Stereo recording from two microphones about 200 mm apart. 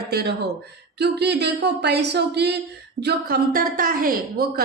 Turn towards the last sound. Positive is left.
turn(degrees=-45)  # may be behind; listen again after turning